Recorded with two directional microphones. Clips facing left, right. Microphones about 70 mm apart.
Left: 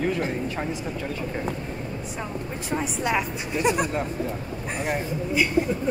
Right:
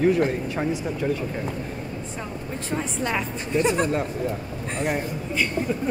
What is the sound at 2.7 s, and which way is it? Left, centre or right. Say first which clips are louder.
Speech: left 1 dB; centre.